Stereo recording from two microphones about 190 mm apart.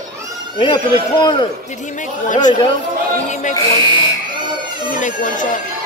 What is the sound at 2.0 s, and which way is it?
Speech, 40° left (ahead or behind).